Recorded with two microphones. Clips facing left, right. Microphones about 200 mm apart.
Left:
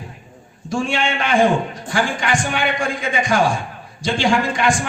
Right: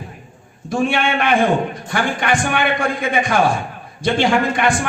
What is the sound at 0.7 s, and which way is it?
A man's voice, 60° right (ahead or behind).